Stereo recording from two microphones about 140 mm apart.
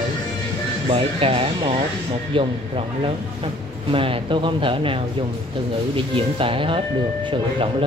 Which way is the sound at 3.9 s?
40° right (ahead or behind).